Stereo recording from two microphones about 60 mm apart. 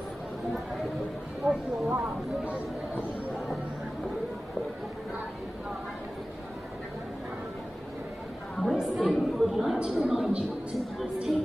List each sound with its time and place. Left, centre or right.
1.4 s speech: centre
1.9 s speech: right
8.6 s a woman's voice: centre